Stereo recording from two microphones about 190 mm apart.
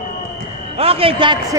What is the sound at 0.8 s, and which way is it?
Speech, 30° right (ahead or behind).